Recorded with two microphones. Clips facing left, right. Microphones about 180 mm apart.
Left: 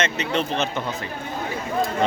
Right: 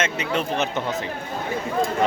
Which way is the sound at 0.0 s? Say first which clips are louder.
Left 1 dB; 10° right (ahead or behind).